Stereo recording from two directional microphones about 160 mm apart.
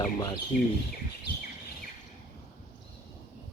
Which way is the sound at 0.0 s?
25° left (ahead or behind).